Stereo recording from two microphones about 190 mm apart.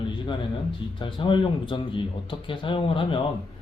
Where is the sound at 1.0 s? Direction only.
25° left (ahead or behind).